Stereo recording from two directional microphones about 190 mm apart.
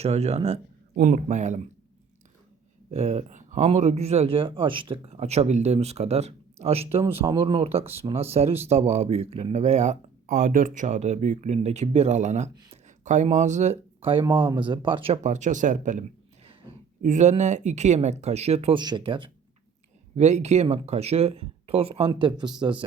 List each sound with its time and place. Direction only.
0.0 s speech: 35° right (ahead or behind)
0.9 s speech: 45° right (ahead or behind)
2.9 s speech: 35° right (ahead or behind)
20.1 s speech: 35° right (ahead or behind)